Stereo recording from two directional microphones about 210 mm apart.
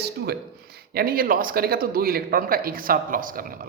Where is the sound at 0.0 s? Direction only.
50° right (ahead or behind).